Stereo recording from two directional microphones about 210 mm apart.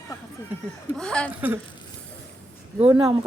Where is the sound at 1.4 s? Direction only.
10° right (ahead or behind).